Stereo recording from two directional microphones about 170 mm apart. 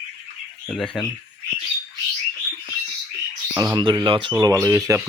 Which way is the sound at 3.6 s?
25° right (ahead or behind).